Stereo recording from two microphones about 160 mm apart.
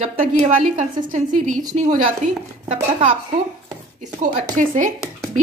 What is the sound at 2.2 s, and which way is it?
Speech, 40° right (ahead or behind).